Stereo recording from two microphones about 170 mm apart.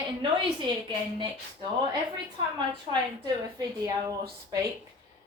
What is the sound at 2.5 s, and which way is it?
A woman's voice, 25° right (ahead or behind).